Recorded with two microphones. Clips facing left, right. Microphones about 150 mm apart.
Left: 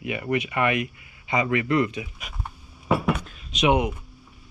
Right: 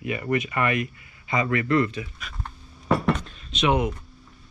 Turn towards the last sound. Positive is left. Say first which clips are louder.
# left 1 dB
turn(degrees=10)  # may be behind; listen again after turning